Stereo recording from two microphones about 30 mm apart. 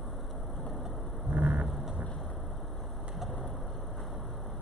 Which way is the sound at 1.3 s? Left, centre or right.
Right.